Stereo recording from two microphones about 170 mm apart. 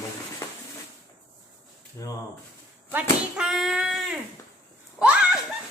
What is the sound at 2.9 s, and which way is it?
Speech, 5° right (ahead or behind).